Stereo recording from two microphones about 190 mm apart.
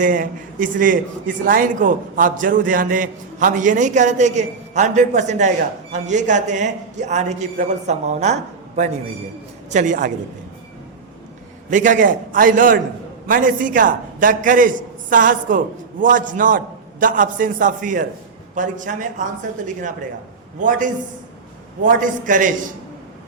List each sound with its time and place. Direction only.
0.0 s a man's voice: 45° right (ahead or behind)
11.7 s a man's voice: 45° right (ahead or behind)